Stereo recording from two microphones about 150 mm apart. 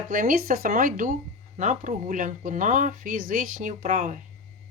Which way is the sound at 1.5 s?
55° right (ahead or behind).